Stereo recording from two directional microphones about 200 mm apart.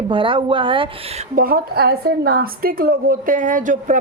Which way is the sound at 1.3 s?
45° right (ahead or behind).